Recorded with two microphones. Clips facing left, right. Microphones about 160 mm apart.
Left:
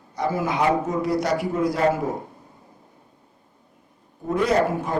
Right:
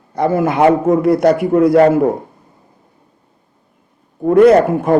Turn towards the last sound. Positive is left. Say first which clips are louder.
# right 12 dB
turn(degrees=-55)  # may be behind; listen again after turning